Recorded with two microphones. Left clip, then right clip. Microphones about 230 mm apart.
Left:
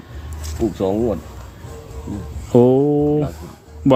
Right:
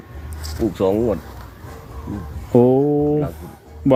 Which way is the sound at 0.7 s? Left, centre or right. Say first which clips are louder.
Right 2 dB; right.